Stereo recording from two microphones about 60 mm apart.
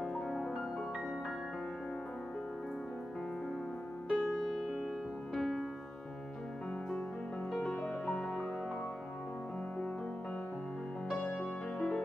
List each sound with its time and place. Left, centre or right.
0.0 s music: centre
4.1 s music: centre
7.6 s music: left
11.2 s music: left